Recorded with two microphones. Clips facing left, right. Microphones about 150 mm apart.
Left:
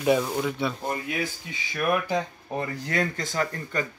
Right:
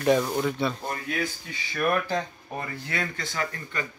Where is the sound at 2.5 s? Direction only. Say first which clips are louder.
Left 5 dB; 40° left (ahead or behind).